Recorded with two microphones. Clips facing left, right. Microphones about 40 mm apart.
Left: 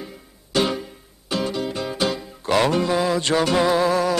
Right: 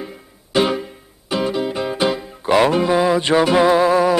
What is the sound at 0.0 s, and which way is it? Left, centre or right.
Music, centre.